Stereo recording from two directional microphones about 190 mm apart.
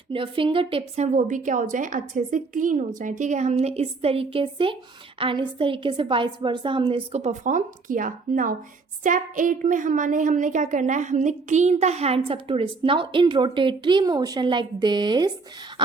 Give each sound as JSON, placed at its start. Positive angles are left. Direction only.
{"t": 0.1, "sound": "a woman's voice", "side_deg": -25}